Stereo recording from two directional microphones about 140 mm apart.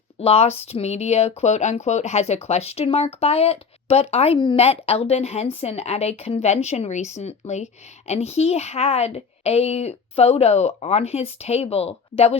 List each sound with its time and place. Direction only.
0.2 s a woman's voice: 45° left (ahead or behind)